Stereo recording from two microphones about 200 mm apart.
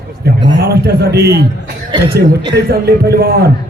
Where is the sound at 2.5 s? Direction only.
50° right (ahead or behind).